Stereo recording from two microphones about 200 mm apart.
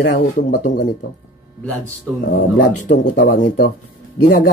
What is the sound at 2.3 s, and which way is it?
Speech, 40° left (ahead or behind).